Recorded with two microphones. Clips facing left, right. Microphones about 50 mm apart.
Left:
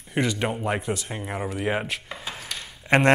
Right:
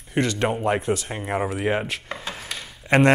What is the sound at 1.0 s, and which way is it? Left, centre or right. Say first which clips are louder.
Speech: right 5 dB; centre.